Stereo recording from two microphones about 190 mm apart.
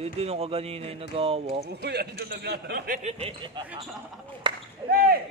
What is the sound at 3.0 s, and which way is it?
Speech, 30° right (ahead or behind).